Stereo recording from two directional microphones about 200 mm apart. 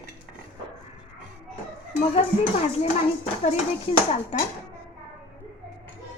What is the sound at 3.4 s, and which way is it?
Speech, 30° left (ahead or behind).